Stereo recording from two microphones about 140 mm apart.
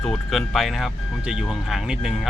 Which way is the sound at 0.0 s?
Centre (ahead or behind).